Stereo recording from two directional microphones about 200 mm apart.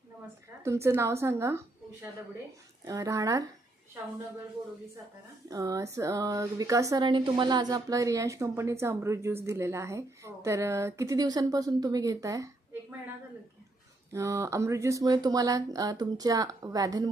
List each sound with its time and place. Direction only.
0.6 s speech: 15° right (ahead or behind)
5.5 s speech: 15° right (ahead or behind)
14.1 s speech: 15° right (ahead or behind)